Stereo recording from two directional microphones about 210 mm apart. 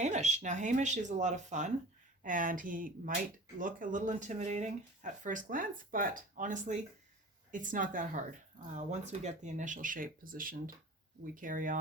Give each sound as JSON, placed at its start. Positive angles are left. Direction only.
{"t": 0.0, "sound": "speech", "side_deg": -35}